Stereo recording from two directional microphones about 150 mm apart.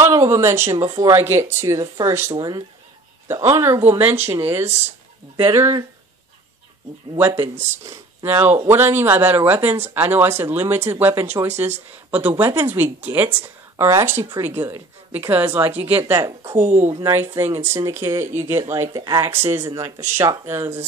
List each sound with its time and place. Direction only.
0.0 s speech: 20° right (ahead or behind)
0.7 s speech: 35° right (ahead or behind)
1.1 s speech: 15° right (ahead or behind)
7.2 s speech: 15° right (ahead or behind)